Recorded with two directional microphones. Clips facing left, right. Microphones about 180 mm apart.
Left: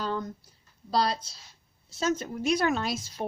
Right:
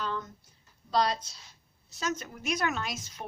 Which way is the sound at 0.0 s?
35° left (ahead or behind).